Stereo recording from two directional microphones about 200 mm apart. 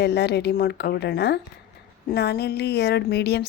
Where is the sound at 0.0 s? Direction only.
55° left (ahead or behind).